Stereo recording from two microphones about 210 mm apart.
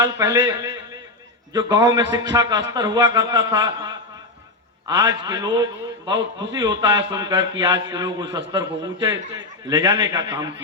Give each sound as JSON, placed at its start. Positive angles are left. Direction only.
{"t": 0.0, "sound": "a man's voice", "side_deg": -15}